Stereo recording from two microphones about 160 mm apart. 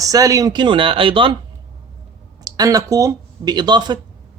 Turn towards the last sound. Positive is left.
turn(degrees=-25)  # may be behind; listen again after turning